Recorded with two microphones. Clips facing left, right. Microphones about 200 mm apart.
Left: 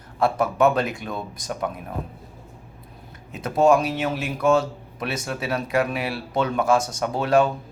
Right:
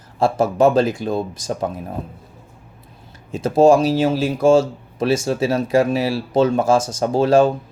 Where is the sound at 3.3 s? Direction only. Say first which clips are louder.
Right 5 dB; 30° right (ahead or behind).